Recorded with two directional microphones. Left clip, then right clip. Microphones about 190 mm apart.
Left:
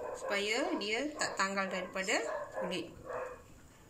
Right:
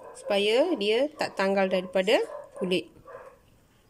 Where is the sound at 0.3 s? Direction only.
50° right (ahead or behind).